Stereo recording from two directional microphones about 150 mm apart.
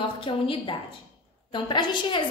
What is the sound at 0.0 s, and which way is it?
A woman's voice, 35° left (ahead or behind).